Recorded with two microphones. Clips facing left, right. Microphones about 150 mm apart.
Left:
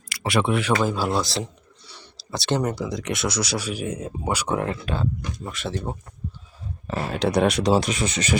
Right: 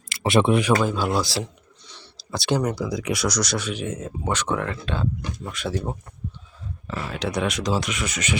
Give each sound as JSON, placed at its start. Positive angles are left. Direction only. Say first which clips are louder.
{"t": 0.1, "sound": "speech", "louder": "right 4 dB", "side_deg": -25}
{"t": 0.8, "sound": "speech", "louder": "even", "side_deg": 5}
{"t": 4.5, "sound": "speech", "louder": "left 2 dB", "side_deg": 25}
{"t": 4.9, "sound": "speech", "louder": "even", "side_deg": 10}
{"t": 6.8, "sound": "speech", "louder": "left 4 dB", "side_deg": 35}